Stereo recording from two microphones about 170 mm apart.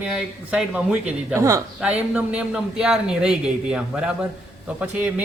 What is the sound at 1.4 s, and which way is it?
Speech, 20° right (ahead or behind).